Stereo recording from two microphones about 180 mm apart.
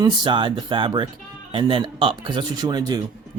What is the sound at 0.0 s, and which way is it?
A man's voice, 25° right (ahead or behind).